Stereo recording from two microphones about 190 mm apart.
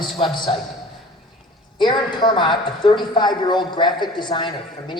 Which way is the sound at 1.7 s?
25° left (ahead or behind).